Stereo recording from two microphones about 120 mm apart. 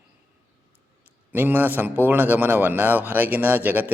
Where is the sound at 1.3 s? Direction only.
15° right (ahead or behind).